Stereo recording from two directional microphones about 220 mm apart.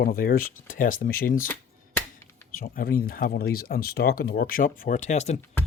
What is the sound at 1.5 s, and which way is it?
Finger snapping, 10° left (ahead or behind).